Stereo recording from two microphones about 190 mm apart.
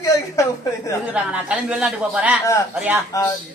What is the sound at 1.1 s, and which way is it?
Speech, 5° right (ahead or behind).